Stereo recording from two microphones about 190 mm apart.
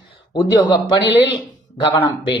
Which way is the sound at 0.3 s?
20° left (ahead or behind).